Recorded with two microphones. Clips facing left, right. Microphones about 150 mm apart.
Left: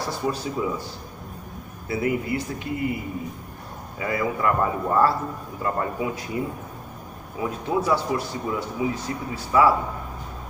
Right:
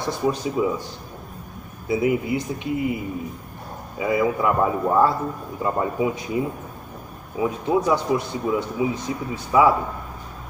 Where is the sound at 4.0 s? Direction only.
10° right (ahead or behind).